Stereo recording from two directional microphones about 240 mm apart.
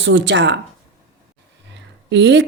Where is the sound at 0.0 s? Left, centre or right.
Right.